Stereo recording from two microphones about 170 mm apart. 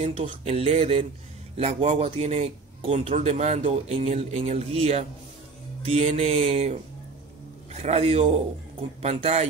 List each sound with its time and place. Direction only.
0.0 s speech: 35° right (ahead or behind)